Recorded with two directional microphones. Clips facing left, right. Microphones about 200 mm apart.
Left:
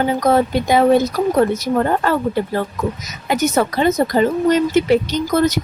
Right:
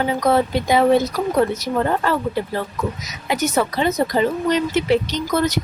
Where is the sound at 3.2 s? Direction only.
45° left (ahead or behind).